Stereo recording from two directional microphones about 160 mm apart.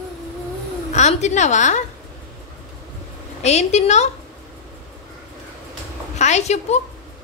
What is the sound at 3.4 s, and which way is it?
Speech, 45° left (ahead or behind).